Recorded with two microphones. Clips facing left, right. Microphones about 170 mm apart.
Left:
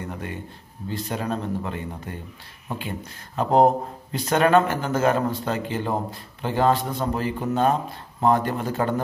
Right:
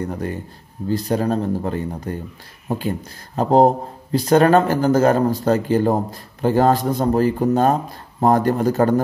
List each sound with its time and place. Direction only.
0.1 s speech: 40° right (ahead or behind)